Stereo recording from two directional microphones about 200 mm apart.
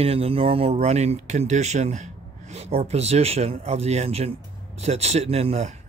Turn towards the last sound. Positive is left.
turn(degrees=-30)  # may be behind; listen again after turning